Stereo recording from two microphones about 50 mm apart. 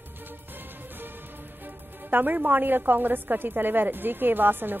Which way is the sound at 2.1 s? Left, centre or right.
Right.